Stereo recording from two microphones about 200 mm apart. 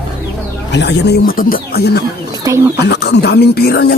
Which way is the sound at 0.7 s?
60° left (ahead or behind).